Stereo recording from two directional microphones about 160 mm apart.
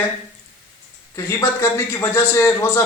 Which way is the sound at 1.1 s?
15° left (ahead or behind).